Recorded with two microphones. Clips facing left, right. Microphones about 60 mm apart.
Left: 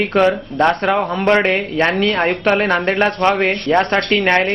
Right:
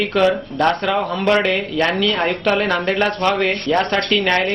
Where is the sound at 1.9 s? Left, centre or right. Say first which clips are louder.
Left 2 dB; left.